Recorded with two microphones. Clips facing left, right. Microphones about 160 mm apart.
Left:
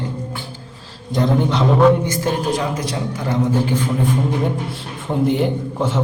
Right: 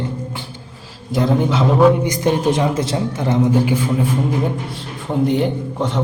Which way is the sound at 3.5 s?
10° right (ahead or behind).